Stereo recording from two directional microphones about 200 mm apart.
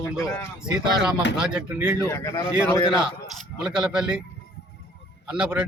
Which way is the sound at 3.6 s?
5° right (ahead or behind).